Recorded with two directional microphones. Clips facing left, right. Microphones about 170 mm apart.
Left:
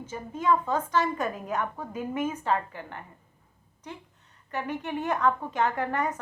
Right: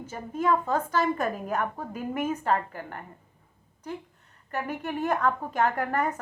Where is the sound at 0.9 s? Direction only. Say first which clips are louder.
Right 1 dB; 40° right (ahead or behind).